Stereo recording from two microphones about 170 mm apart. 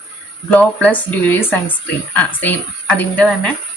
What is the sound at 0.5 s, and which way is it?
A woman's voice, 10° left (ahead or behind).